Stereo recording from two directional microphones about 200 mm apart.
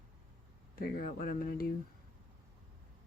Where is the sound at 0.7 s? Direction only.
50° left (ahead or behind).